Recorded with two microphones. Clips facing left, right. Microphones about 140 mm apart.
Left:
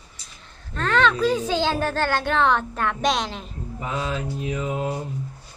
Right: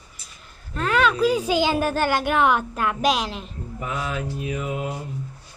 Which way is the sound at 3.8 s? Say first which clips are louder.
Left 1 dB; 30° left (ahead or behind).